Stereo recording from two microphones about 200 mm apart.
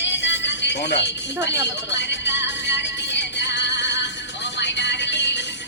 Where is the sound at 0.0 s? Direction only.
60° left (ahead or behind).